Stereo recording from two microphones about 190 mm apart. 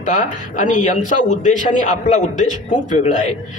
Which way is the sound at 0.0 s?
40° left (ahead or behind).